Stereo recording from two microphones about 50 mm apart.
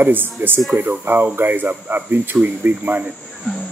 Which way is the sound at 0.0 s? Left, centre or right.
Right.